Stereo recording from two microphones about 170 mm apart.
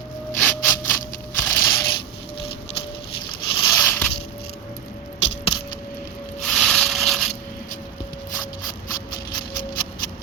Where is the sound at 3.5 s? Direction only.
20° left (ahead or behind).